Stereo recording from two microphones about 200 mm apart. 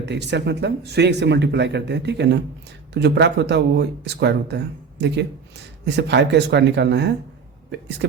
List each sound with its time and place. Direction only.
0.0 s speech: 60° right (ahead or behind)